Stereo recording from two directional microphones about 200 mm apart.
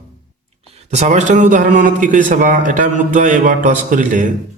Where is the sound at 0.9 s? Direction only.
35° right (ahead or behind).